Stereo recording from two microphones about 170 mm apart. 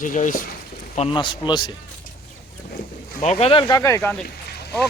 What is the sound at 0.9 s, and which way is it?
Speech, 30° left (ahead or behind).